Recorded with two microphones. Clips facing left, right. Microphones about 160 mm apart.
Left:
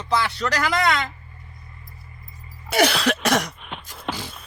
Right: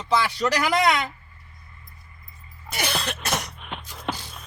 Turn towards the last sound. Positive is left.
turn(degrees=0)  # may be behind; listen again after turning